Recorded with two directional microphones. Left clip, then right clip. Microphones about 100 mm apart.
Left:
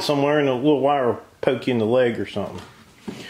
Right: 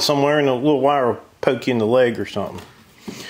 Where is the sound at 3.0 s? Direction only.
30° right (ahead or behind).